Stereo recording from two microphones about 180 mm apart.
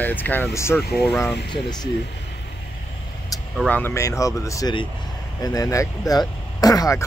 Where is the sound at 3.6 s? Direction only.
10° left (ahead or behind).